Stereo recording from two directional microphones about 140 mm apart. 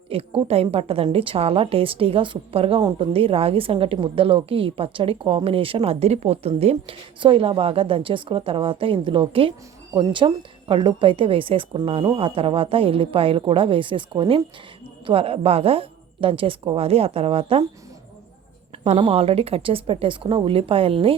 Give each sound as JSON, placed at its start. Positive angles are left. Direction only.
{"t": 0.1, "sound": "a woman's voice", "side_deg": -45}
{"t": 18.9, "sound": "a woman's voice", "side_deg": -40}